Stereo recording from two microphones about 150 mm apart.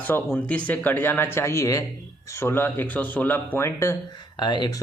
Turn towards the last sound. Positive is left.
turn(degrees=30)  # may be behind; listen again after turning